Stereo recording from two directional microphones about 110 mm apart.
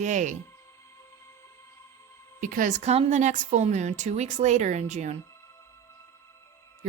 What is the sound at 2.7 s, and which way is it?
A woman's voice, 80° right.